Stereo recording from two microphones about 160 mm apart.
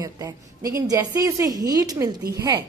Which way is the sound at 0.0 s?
20° right (ahead or behind).